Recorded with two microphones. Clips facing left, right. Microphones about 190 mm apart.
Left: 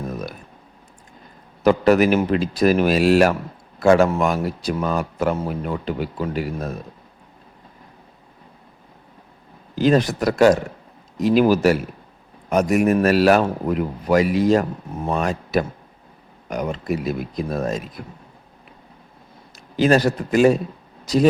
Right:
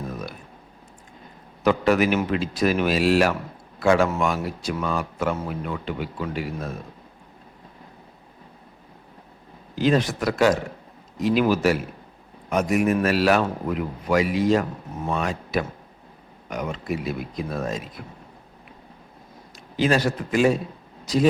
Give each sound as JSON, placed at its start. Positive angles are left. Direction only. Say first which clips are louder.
{"t": 1.6, "sound": "speech", "louder": "left 4 dB", "side_deg": 40}
{"t": 9.7, "sound": "speech", "louder": "left 4 dB", "side_deg": 40}
{"t": 19.7, "sound": "a man's voice", "louder": "left 5 dB", "side_deg": 40}